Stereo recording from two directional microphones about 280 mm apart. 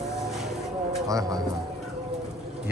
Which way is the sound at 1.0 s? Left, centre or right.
Centre.